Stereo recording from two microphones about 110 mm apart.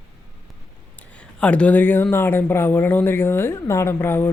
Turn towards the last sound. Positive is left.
turn(degrees=20)  # may be behind; listen again after turning